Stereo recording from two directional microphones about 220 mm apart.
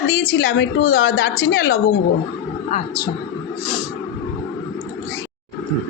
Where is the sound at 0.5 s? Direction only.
55° left (ahead or behind).